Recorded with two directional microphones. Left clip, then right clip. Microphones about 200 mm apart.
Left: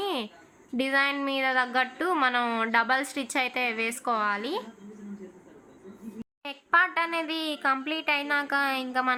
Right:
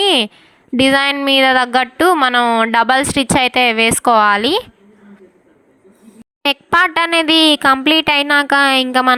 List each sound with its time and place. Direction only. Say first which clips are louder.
0.0 s a sound: right 18 dB; 50° right (ahead or behind)
0.8 s speech: right 13 dB; 45° right (ahead or behind)
6.4 s speech: right 11 dB; 55° right (ahead or behind)